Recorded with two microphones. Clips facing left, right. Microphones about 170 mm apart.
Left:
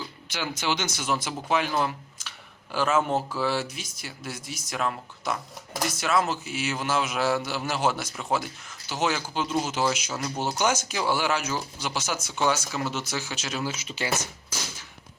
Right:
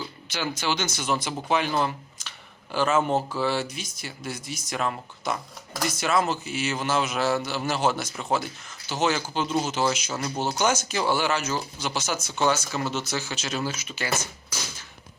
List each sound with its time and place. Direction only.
0.5 s speech: 20° left (ahead or behind)
13.7 s speech: 30° left (ahead or behind)